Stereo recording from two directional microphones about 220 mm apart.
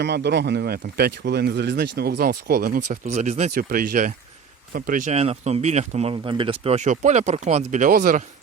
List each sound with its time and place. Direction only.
0.0 s speech: 50° right (ahead or behind)